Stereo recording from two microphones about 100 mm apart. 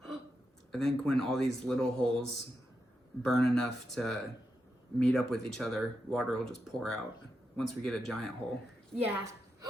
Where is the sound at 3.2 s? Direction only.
5° left (ahead or behind).